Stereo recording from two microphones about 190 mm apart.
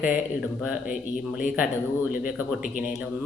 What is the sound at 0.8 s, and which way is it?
Speech, 45° left (ahead or behind).